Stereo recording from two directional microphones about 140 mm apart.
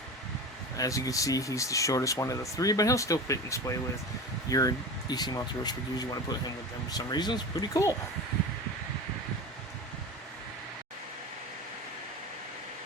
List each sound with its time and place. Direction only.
0.8 s speech: 25° left (ahead or behind)